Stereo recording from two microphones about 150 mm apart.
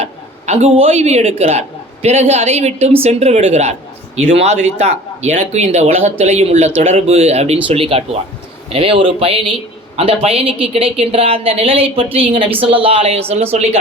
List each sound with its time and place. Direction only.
0.0 s speech: 45° right (ahead or behind)